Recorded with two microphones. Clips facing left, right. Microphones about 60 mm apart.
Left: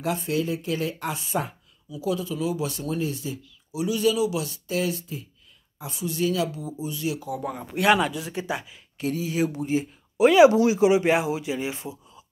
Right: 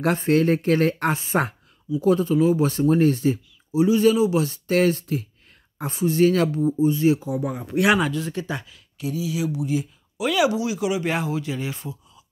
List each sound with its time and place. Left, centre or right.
0.0 s speech: right
2.0 s speech: right
3.8 s speech: right
4.6 s speech: right
5.0 s speech: right
5.8 s speech: right
7.6 s speech: centre
8.1 s speech: centre
8.9 s speech: left
11.1 s speech: centre